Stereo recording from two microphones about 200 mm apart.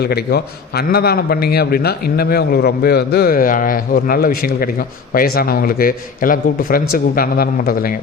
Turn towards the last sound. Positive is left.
turn(degrees=45)  # may be behind; listen again after turning